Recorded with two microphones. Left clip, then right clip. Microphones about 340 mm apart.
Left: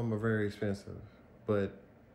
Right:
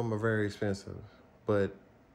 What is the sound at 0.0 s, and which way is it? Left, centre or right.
A man's voice, right.